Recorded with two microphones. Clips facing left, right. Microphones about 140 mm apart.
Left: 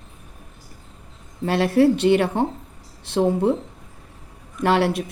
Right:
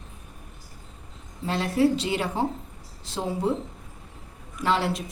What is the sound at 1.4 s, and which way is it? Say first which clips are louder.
A woman's voice: left 6 dB; 70° left (ahead or behind).